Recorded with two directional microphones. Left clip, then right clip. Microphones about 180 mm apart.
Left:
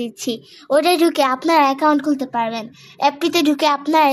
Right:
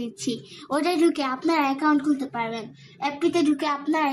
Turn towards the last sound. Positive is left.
turn(degrees=45)  # may be behind; listen again after turning